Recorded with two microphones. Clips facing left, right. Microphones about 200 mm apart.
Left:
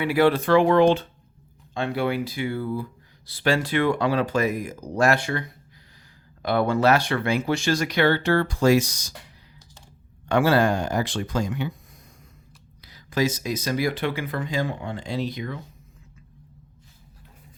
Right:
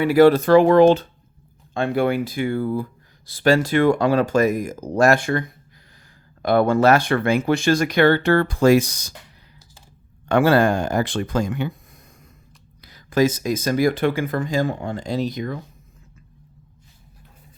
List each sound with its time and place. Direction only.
0.0 s speech: 40° right (ahead or behind)
10.2 s speech: 55° right (ahead or behind)
12.8 s speech: 50° right (ahead or behind)